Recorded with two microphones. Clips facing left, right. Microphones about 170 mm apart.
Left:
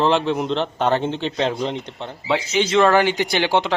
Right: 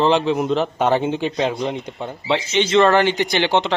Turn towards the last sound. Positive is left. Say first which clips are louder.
# right 1 dB
turn(degrees=10)  # may be behind; listen again after turning